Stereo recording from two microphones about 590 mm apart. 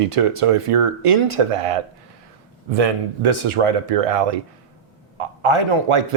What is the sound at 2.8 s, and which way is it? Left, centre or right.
Speech, right.